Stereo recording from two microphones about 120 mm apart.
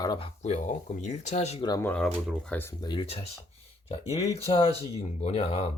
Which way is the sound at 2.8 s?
40° left (ahead or behind).